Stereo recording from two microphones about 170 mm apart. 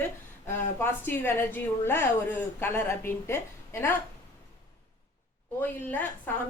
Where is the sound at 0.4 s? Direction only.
10° left (ahead or behind).